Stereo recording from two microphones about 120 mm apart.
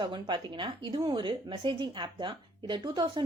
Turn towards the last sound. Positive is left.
turn(degrees=-40)  # may be behind; listen again after turning